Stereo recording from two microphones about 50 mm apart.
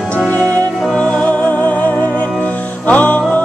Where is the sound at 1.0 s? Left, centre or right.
Left.